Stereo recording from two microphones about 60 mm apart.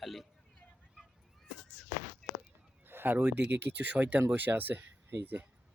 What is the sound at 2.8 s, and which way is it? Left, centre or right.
Speech, right.